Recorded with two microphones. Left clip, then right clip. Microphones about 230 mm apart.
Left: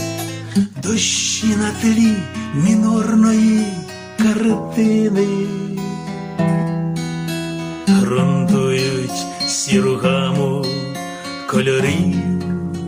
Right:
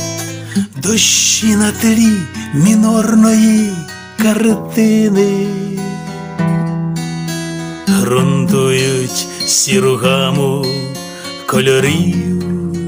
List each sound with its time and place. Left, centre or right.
0.9 s music: right
6.3 s music: right
7.9 s music: right
11.4 s music: right